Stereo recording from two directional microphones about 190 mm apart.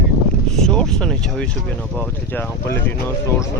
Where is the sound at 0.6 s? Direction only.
5° left (ahead or behind).